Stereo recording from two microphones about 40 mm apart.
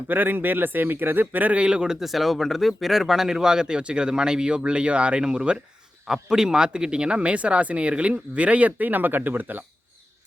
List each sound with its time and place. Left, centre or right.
0.1 s a man's voice: right
1.5 s speech: right
1.9 s speech: centre; by 9.6 s right